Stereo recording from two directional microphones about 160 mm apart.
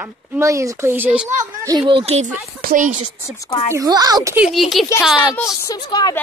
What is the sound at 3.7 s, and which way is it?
Speech, 20° right (ahead or behind).